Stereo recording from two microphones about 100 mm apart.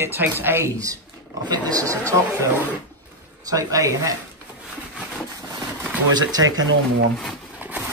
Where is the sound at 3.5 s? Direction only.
35° right (ahead or behind).